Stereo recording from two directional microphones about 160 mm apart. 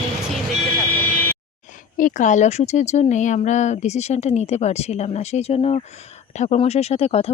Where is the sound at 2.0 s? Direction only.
55° left (ahead or behind).